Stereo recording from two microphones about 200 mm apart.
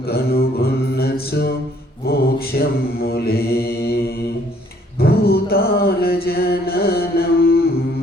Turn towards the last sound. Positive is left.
turn(degrees=50)  # may be behind; listen again after turning